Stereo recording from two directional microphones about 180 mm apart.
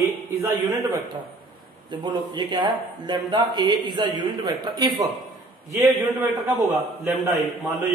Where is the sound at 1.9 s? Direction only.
25° right (ahead or behind).